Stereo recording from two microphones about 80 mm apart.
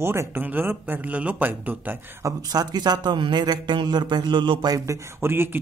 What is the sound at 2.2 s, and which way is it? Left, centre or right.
A man's voice, right.